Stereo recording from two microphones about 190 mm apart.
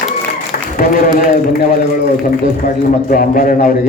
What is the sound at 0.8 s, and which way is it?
A man's voice, 45° left (ahead or behind).